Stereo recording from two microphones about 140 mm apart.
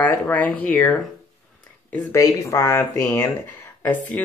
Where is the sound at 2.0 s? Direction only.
25° left (ahead or behind).